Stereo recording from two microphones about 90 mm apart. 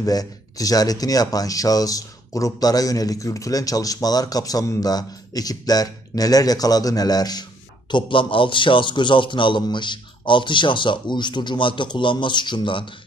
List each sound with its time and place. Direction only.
0.0 s speech: 40° left (ahead or behind)
7.9 s a man's voice: 70° left (ahead or behind)